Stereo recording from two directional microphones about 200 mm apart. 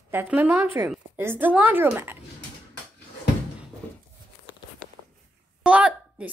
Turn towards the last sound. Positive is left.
turn(degrees=-5)  # may be behind; listen again after turning